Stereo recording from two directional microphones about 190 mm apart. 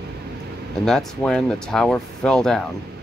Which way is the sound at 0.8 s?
5° left (ahead or behind).